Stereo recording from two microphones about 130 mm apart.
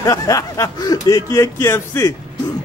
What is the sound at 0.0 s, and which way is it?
Speech, 25° left (ahead or behind).